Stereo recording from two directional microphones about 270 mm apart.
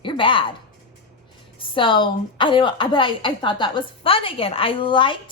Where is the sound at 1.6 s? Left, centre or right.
Centre.